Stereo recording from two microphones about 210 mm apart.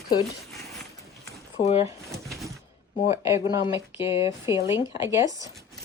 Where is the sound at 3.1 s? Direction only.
15° right (ahead or behind).